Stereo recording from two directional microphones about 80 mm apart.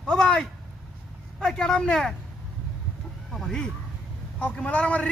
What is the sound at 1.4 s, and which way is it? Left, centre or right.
Speech, centre.